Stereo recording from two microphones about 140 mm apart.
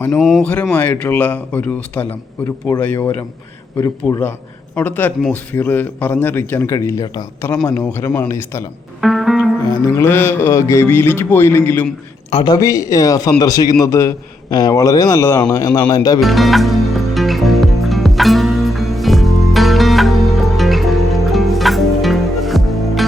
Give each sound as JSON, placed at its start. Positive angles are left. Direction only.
{"t": 0.2, "sound": "speech", "side_deg": 0}
{"t": 0.8, "sound": "a man's voice", "side_deg": 10}
{"t": 3.8, "sound": "a man's voice", "side_deg": 25}
{"t": 4.2, "sound": "a man's voice", "side_deg": 15}
{"t": 9.0, "sound": "music", "side_deg": 0}
{"t": 10.0, "sound": "a man's voice", "side_deg": 15}
{"t": 12.3, "sound": "a man's voice", "side_deg": 40}
{"t": 12.5, "sound": "a man's voice", "side_deg": 25}
{"t": 16.2, "sound": "music", "side_deg": 0}